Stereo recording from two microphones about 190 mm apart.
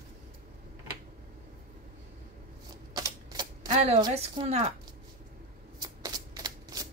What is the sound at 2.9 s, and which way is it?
Typewriter, 20° right (ahead or behind).